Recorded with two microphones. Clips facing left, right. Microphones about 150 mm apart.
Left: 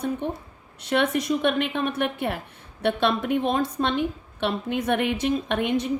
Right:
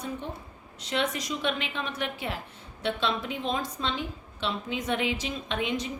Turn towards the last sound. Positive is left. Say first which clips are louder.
# left 6 dB
turn(degrees=55)  # may be behind; listen again after turning